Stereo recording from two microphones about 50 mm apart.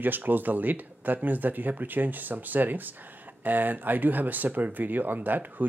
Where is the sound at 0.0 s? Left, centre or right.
Right.